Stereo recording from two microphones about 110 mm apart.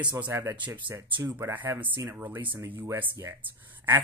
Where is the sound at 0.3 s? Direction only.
25° right (ahead or behind).